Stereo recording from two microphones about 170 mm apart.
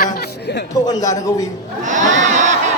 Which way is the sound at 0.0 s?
80° left.